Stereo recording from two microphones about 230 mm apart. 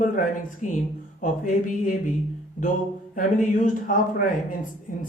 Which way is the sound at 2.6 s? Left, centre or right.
Left.